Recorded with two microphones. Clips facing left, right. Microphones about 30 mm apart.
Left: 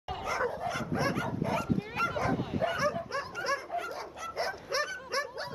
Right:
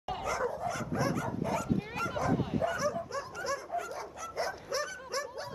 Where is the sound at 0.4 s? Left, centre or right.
Left.